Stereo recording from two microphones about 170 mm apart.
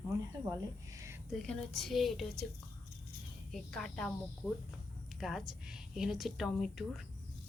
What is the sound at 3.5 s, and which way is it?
A woman's voice, centre (ahead or behind).